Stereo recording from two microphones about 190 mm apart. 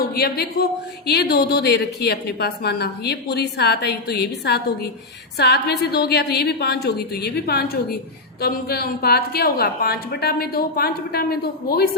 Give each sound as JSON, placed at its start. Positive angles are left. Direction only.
{"t": 0.1, "sound": "speech", "side_deg": 55}